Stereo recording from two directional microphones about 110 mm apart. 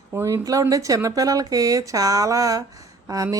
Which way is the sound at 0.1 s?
25° right (ahead or behind).